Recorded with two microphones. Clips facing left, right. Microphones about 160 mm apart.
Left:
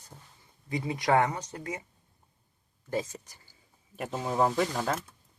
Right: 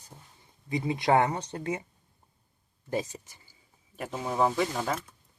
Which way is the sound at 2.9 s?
15° right (ahead or behind).